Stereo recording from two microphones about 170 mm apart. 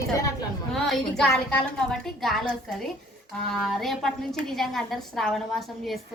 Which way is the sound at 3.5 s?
Centre (ahead or behind).